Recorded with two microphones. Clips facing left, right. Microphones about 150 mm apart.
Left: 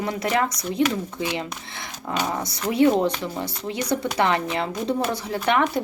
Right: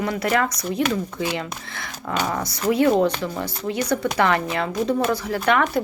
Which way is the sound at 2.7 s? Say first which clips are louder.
Even; 25° left (ahead or behind).